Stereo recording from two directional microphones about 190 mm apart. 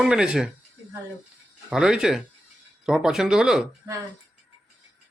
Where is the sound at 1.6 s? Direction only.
5° right (ahead or behind).